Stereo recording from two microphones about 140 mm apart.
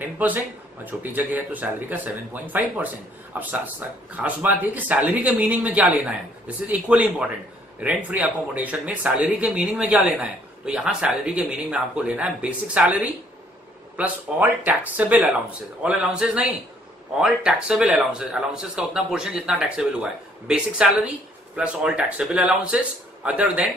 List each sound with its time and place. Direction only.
0.0 s speech: 10° right (ahead or behind)